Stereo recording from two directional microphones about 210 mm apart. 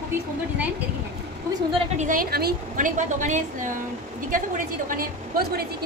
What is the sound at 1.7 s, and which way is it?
A woman's voice, 35° right (ahead or behind).